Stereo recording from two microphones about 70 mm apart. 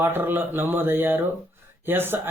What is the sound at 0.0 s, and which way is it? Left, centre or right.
A man's voice, right.